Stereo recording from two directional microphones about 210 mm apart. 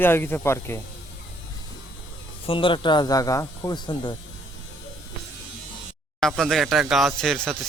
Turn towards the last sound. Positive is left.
turn(degrees=0)  # may be behind; listen again after turning